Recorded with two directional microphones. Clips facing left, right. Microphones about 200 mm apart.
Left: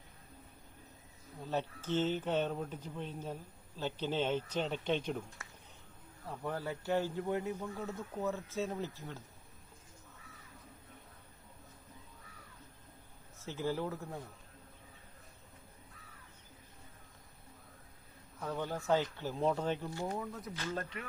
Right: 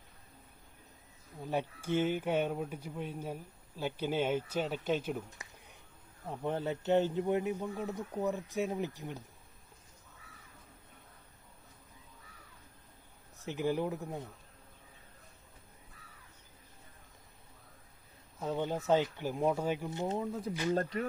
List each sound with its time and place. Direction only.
1.5 s speech: 10° right (ahead or behind)
6.2 s speech: 20° right (ahead or behind)
13.4 s speech: 15° right (ahead or behind)
18.3 s speech: 25° right (ahead or behind)
20.5 s speech: 15° right (ahead or behind)
20.7 s speech: 35° right (ahead or behind)